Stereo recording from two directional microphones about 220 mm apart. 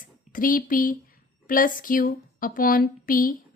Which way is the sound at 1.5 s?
40° left (ahead or behind).